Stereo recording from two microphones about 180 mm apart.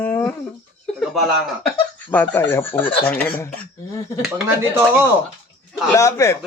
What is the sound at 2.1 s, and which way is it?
A man's voice, 10° left (ahead or behind).